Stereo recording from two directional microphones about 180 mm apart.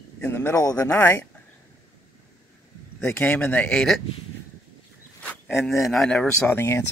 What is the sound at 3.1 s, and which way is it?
Speech, 10° left (ahead or behind).